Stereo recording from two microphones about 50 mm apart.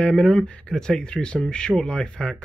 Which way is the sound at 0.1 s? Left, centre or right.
Centre.